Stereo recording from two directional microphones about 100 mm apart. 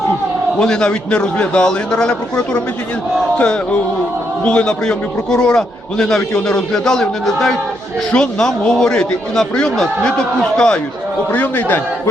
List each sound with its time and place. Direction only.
0.6 s a man's voice: 10° left (ahead or behind)